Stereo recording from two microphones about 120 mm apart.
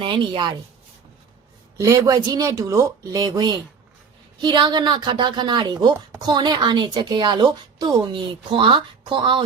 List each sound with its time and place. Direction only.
0.0 s a woman's voice: 40° right (ahead or behind)
1.8 s a woman's voice: 30° right (ahead or behind); by 9.4 s 45° right (ahead or behind)